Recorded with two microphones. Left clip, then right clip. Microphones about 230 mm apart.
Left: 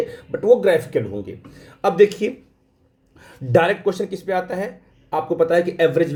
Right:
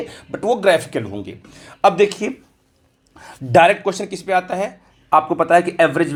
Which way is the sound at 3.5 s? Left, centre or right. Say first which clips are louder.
Right 4 dB; right.